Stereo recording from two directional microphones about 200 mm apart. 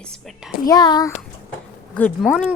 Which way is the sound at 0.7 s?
20° left (ahead or behind).